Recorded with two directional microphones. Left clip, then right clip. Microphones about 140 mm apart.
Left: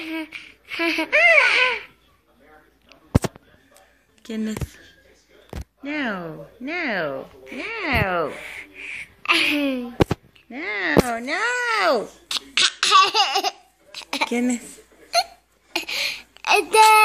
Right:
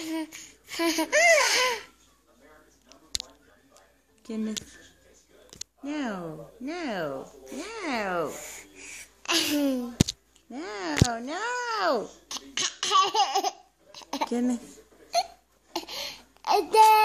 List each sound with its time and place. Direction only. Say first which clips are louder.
0.0 s babbling: left 4 dB; 45° right (ahead or behind)
4.2 s speech: left 5 dB; centre (ahead or behind)
5.9 s a child's voice: left 7 dB; 5° left (ahead or behind)
8.3 s a sound: left 7 dB; 30° right (ahead or behind)
9.2 s speech: left 7 dB; 40° right (ahead or behind)
10.5 s speech: left 9 dB; 10° right (ahead or behind)
11.2 s a child's voice: left 8 dB; 5° left (ahead or behind)
12.3 s laughter: left 15 dB; 25° right (ahead or behind)
14.3 s a child's voice: left 5 dB; 5° right (ahead or behind)
15.7 s a sound: left 10 dB; 25° right (ahead or behind)